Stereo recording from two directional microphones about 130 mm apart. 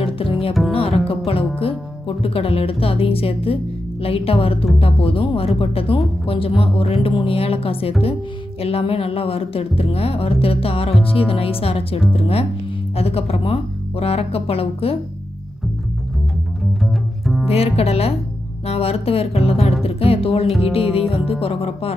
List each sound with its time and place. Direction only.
0.0 s music: 45° left (ahead or behind)
1.6 s speech: 45° left (ahead or behind)
4.0 s music: 45° left (ahead or behind)
17.5 s music: 50° left (ahead or behind)